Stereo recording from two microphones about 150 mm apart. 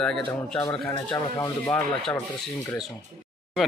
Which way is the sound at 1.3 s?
20° left (ahead or behind).